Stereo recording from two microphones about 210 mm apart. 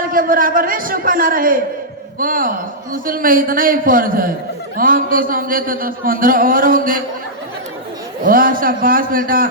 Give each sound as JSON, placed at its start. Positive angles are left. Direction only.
{"t": 0.1, "sound": "a man's voice", "side_deg": -40}
{"t": 8.2, "sound": "a man's voice", "side_deg": -40}